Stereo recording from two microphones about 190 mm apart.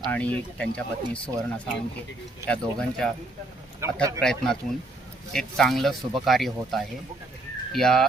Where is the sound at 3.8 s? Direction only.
15° right (ahead or behind).